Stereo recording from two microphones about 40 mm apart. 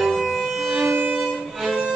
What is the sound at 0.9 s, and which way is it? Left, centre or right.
Violin, right.